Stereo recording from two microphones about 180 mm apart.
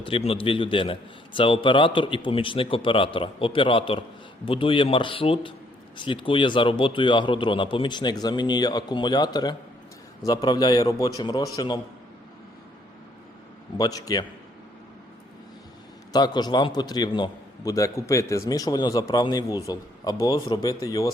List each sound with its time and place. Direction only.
0.0 s a man's voice: 30° left (ahead or behind)
13.7 s a man's voice: 20° left (ahead or behind)
16.1 s a man's voice: 25° left (ahead or behind)